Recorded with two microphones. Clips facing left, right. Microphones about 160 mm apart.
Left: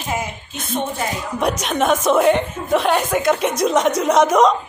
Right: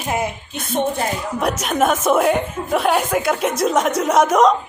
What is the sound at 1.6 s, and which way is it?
A woman's voice, 5° right (ahead or behind).